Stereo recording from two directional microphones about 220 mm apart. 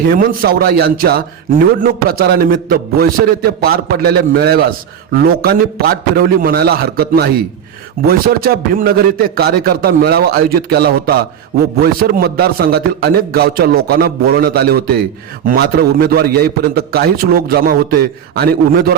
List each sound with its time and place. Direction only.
0.1 s a man's voice: 40° right (ahead or behind)